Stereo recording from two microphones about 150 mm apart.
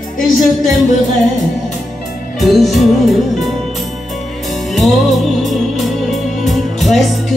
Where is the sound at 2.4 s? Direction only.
Centre (ahead or behind).